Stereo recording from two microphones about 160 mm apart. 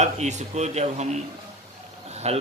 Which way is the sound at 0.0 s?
45° right (ahead or behind).